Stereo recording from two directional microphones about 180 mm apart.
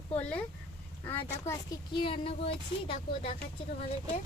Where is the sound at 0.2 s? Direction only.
5° left (ahead or behind).